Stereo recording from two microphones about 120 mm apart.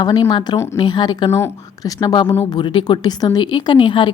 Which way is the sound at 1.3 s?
20° left (ahead or behind).